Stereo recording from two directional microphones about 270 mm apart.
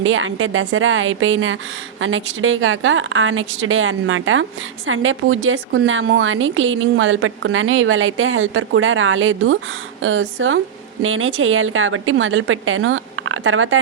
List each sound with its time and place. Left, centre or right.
0.0 s a woman's voice: right